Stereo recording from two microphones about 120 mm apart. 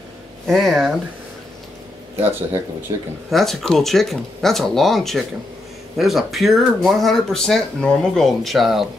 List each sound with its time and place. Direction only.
0.5 s speech: centre (ahead or behind)
2.9 s speech: 30° right (ahead or behind)
3.3 s speech: centre (ahead or behind)